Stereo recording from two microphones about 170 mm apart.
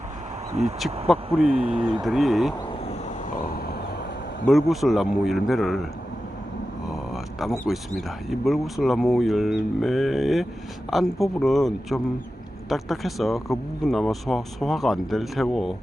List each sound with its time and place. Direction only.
0.6 s speech: 40° right (ahead or behind)
1.0 s speech: centre (ahead or behind)
1.5 s speech: 30° right (ahead or behind)
2.0 s speech: centre (ahead or behind)
3.3 s a sound: 60° left (ahead or behind)
4.4 s speech: centre (ahead or behind)
6.8 s speech: centre (ahead or behind)